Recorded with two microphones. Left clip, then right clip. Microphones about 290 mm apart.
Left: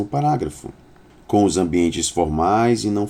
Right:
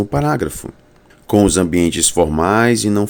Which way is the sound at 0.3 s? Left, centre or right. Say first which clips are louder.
Right 4 dB; right.